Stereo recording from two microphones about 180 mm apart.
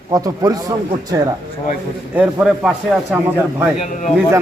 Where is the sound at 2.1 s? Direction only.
5° right (ahead or behind).